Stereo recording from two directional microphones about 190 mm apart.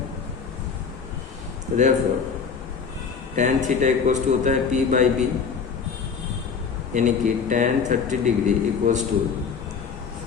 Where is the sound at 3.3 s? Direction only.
40° right (ahead or behind).